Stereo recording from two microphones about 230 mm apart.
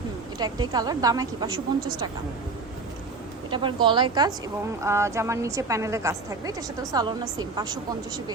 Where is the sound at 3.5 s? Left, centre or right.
Right.